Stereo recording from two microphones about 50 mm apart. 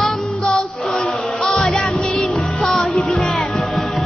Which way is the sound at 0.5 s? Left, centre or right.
Centre.